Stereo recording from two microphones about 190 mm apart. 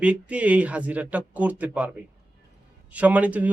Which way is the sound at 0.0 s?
5° right (ahead or behind).